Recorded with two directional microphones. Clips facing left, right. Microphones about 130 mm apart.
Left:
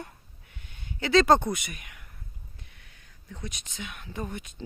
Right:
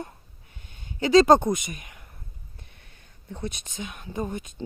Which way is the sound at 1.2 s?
20° right (ahead or behind).